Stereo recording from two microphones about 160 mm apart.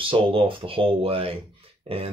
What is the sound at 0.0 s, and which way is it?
Speech, 35° right (ahead or behind).